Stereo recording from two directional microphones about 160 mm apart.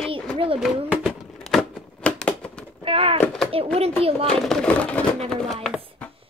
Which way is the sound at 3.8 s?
40° right (ahead or behind).